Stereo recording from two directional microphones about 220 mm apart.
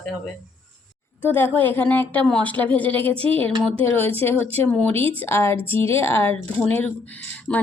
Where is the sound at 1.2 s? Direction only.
10° left (ahead or behind).